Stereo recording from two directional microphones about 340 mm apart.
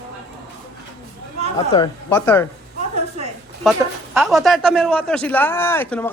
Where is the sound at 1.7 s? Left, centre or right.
Centre.